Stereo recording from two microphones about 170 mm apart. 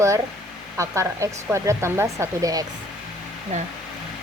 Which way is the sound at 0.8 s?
20° right (ahead or behind).